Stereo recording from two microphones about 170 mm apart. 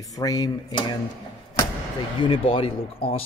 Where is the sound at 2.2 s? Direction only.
30° left (ahead or behind).